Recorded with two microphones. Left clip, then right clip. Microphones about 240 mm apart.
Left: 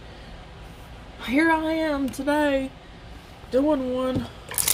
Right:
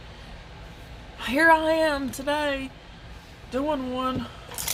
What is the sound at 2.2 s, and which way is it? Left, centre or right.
Speech, right.